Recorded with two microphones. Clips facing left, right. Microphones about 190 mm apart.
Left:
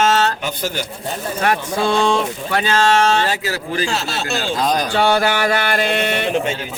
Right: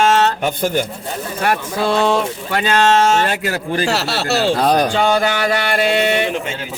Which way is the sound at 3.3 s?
55° right (ahead or behind).